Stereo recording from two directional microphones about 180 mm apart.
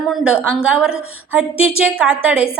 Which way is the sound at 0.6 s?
5° right (ahead or behind).